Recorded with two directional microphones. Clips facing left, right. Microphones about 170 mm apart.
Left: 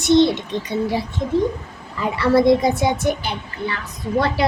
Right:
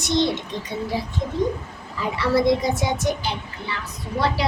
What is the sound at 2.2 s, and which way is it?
A woman's voice, 55° left (ahead or behind).